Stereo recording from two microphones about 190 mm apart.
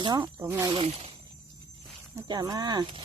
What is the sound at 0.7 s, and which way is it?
Speech, 30° right (ahead or behind).